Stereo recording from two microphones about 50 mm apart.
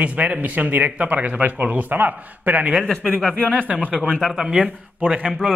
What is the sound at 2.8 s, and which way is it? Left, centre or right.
Speech, centre.